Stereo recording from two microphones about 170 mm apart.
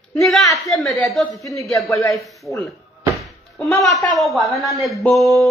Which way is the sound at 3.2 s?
Centre (ahead or behind).